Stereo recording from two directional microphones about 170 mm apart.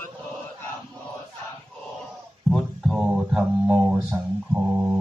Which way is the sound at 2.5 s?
Centre (ahead or behind).